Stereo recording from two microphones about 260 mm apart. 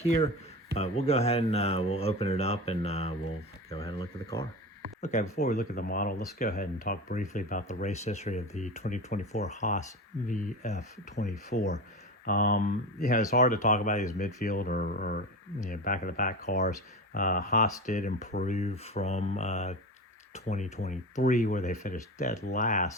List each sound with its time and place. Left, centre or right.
0.0 s speech: left
4.9 s speech: left